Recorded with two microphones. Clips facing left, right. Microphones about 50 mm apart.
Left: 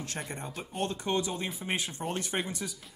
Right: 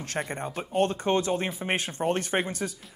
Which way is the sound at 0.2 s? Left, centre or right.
Right.